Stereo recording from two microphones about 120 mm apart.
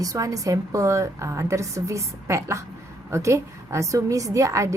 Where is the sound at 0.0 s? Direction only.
30° right (ahead or behind).